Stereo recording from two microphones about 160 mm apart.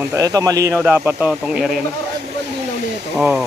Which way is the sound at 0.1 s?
20° right (ahead or behind).